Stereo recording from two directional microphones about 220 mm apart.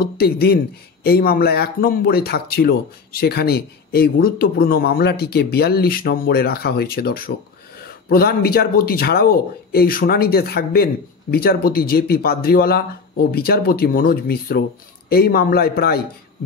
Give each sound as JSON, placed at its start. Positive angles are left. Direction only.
{"t": 0.0, "sound": "speech", "side_deg": 45}